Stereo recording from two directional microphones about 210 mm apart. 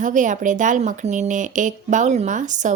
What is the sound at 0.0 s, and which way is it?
Speech, 35° right (ahead or behind).